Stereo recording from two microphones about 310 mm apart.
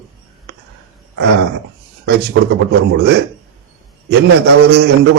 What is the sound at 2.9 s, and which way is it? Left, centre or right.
A man's voice, right.